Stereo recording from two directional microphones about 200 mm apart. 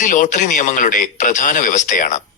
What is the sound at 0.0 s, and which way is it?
A man's voice, 40° left (ahead or behind).